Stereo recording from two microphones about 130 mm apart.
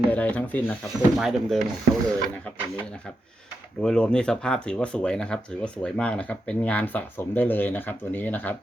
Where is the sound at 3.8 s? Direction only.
5° left (ahead or behind).